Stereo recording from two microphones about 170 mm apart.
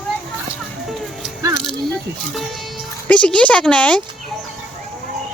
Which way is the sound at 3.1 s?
5° left (ahead or behind).